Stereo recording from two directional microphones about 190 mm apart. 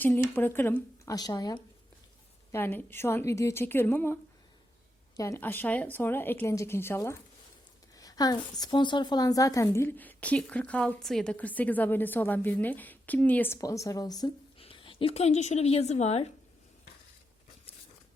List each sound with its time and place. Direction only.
0.0 s a woman's voice: 10° left (ahead or behind)
2.5 s a woman's voice: 10° left (ahead or behind); by 16.2 s 35° left (ahead or behind)